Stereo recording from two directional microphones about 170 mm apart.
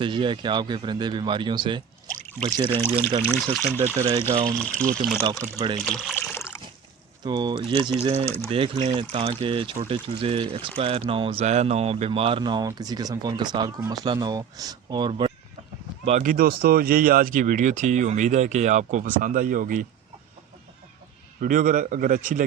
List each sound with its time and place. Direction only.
0.0 s speech: 30° right (ahead or behind)
3.3 s speech: centre (ahead or behind)
3.7 s speech: 15° right (ahead or behind)
4.5 s speech: 5° left (ahead or behind)
5.2 s speech: 20° right (ahead or behind)
5.8 s speech: centre (ahead or behind)
6.1 s a sound: 15° left (ahead or behind)
7.2 s speech: 25° right (ahead or behind)
16.0 s speech: 50° right (ahead or behind)
21.4 s speech: 50° right (ahead or behind)